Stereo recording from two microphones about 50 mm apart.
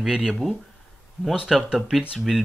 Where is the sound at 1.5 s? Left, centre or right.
Centre.